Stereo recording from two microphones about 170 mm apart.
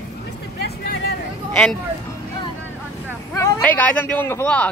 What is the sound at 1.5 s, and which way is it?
Speech, 5° left (ahead or behind).